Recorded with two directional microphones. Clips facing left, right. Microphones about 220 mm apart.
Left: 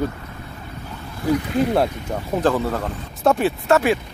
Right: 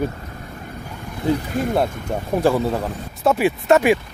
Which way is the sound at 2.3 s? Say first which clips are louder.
Right 2 dB; 10° right (ahead or behind).